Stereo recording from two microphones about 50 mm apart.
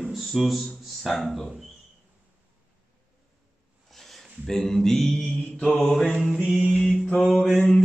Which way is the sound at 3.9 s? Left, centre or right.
Centre.